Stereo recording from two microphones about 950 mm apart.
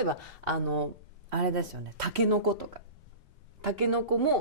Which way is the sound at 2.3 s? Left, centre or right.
Right.